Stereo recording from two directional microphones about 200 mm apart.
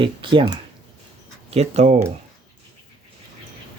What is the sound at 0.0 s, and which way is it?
Speech, 25° right (ahead or behind).